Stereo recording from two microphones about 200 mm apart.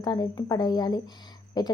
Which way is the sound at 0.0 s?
20° left (ahead or behind).